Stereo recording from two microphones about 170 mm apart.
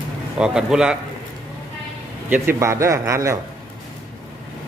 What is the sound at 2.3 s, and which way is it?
A man's voice, 15° right (ahead or behind).